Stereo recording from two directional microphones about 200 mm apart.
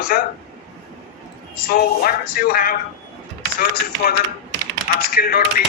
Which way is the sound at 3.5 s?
50° left (ahead or behind).